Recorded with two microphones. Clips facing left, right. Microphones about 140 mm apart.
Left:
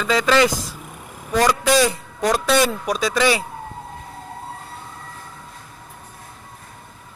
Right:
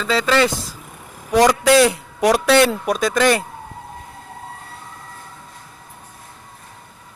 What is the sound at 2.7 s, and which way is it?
Speech, centre (ahead or behind).